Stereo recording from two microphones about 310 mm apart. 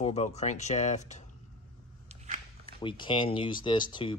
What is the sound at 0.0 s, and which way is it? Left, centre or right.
Speech, left.